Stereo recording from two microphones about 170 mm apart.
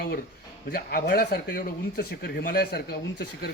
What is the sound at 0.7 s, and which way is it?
Speech, 65° left (ahead or behind).